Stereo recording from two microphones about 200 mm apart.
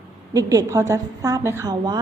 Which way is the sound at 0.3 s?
15° right (ahead or behind).